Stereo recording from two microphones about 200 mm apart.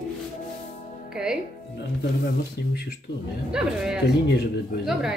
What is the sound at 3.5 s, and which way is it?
Speech, 5° right (ahead or behind).